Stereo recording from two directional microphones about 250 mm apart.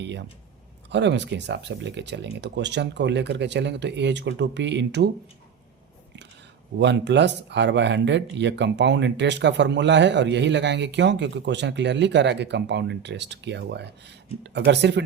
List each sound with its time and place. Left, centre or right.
0.0 s speech: right
6.7 s speech: right